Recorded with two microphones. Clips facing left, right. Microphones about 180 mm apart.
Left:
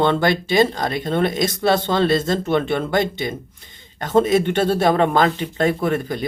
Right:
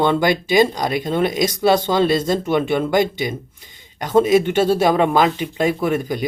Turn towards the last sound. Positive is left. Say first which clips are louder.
# right 1 dB
turn(degrees=-10)  # may be behind; listen again after turning